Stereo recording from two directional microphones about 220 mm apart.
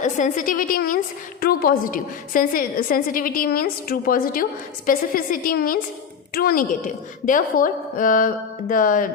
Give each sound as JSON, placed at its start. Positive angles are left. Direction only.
{"t": 0.0, "sound": "a woman's voice", "side_deg": 35}